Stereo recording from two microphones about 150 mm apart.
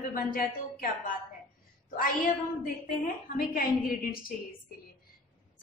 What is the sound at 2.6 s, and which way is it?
A woman's voice, 70° left (ahead or behind).